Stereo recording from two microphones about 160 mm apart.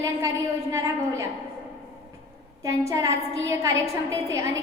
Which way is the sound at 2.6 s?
20° right (ahead or behind).